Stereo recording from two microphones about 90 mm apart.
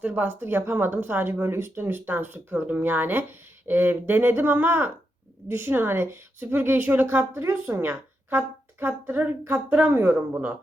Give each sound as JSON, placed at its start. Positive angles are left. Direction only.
{"t": 0.0, "sound": "speech", "side_deg": -20}